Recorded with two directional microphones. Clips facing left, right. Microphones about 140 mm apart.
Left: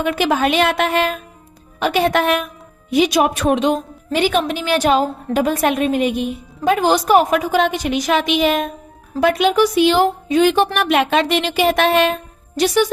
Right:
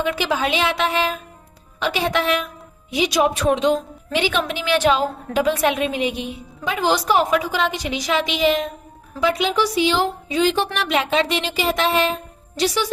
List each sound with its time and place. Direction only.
0.0 s a woman's voice: 55° left (ahead or behind)